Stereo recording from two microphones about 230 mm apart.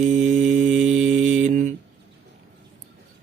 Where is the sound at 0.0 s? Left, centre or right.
Right.